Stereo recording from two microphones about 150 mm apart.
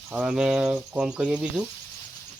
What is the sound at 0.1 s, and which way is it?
Speech, 5° right (ahead or behind).